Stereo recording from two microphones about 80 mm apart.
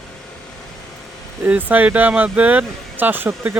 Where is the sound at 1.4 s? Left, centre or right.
Right.